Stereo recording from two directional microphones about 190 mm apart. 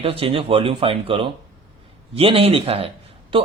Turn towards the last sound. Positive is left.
turn(degrees=-25)  # may be behind; listen again after turning